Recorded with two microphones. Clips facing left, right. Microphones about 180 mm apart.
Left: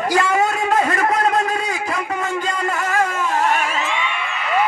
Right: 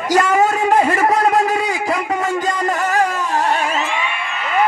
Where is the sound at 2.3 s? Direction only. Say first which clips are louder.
Right 3 dB; 40° right (ahead or behind).